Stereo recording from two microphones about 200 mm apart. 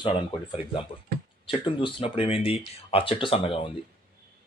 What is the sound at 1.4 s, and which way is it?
Speech, 25° left (ahead or behind).